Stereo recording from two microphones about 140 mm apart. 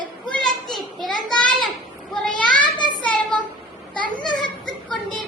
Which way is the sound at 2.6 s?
35° left (ahead or behind).